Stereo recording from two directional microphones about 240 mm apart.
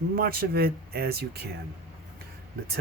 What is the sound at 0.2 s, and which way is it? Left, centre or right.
Speech, right.